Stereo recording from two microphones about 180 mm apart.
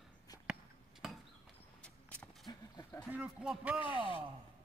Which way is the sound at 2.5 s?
25° left (ahead or behind).